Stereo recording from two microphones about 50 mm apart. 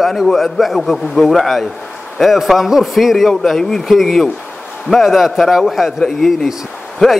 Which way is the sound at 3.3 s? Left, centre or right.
Centre.